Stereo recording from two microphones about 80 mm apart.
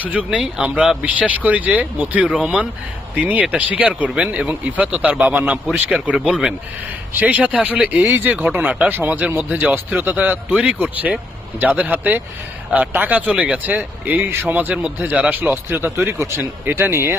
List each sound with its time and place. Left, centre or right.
0.0 s speech: centre
6.1 s speech: centre
7.1 s speech: centre